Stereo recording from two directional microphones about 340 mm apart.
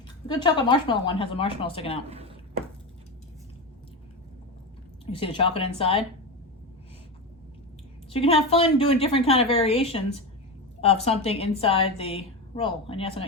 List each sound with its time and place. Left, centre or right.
0.3 s a woman's voice: centre
2.0 s speech: centre
5.1 s a woman's voice: centre
8.1 s a woman's voice: centre